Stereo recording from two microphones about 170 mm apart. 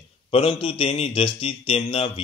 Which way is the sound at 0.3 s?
30° left (ahead or behind).